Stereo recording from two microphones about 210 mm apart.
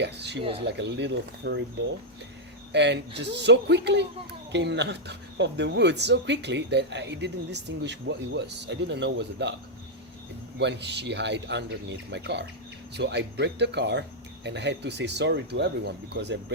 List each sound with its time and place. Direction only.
0.0 s a sound: 55° right (ahead or behind)
0.6 s speech: 55° right (ahead or behind)
2.7 s speech: 55° right (ahead or behind)
10.6 s speech: 55° right (ahead or behind)